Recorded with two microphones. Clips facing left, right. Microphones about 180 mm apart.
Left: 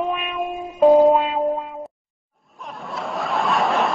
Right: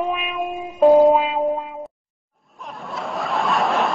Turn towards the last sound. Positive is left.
turn(degrees=0)  # may be behind; listen again after turning